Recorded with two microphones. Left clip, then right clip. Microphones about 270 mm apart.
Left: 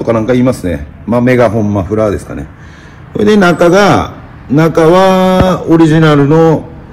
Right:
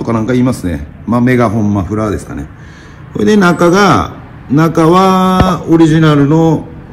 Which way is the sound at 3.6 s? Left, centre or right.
Centre.